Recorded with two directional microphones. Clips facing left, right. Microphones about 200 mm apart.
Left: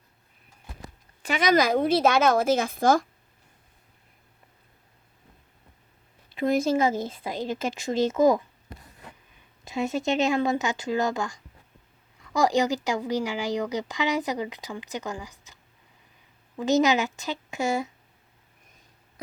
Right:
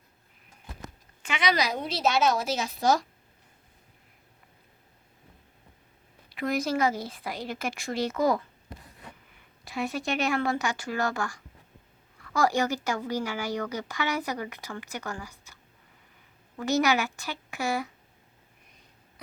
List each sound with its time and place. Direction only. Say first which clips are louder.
1.2 s a woman's voice: left 6 dB; 40° left (ahead or behind)
6.4 s speech: left 4 dB; 25° left (ahead or behind)
9.6 s a woman's voice: left 4 dB; 20° left (ahead or behind)
16.6 s speech: left 3 dB; 20° left (ahead or behind)